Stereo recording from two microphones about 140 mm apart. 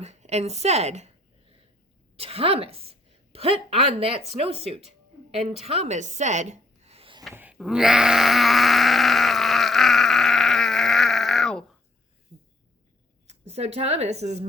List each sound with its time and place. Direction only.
0.0 s a woman's voice: 50° right (ahead or behind)
2.1 s a woman's voice: 45° right (ahead or behind)
7.3 s groan: 10° right (ahead or behind)
13.2 s a woman's voice: 50° right (ahead or behind)